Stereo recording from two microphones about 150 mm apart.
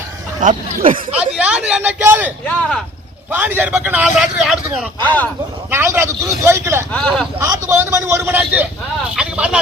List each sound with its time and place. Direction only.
0.4 s speech: 65° right (ahead or behind)
1.2 s a man's voice: 10° right (ahead or behind)
2.5 s speech: 5° left (ahead or behind)
3.3 s a man's voice: 10° right (ahead or behind)
5.0 s speech: 10° left (ahead or behind)
5.7 s a man's voice: 15° right (ahead or behind)
6.9 s speech: 5° left (ahead or behind)
7.3 s a man's voice: 20° right (ahead or behind)